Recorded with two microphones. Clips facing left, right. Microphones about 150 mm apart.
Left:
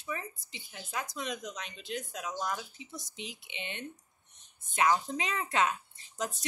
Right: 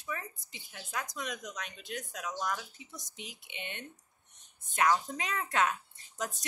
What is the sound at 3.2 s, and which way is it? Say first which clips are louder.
Speech: left 1 dB; 50° right (ahead or behind).